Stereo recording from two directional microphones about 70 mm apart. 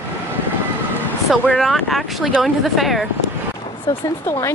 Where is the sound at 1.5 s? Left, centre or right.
Centre.